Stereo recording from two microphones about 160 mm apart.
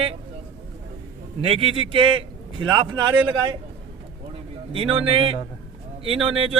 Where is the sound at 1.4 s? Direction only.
35° right (ahead or behind).